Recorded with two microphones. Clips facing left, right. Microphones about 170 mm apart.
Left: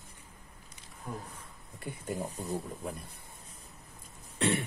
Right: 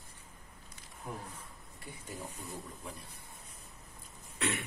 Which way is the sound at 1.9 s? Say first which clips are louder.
Left 8 dB; 55° left (ahead or behind).